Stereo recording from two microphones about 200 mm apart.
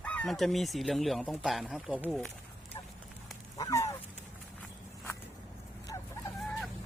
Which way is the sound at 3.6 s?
15° left (ahead or behind).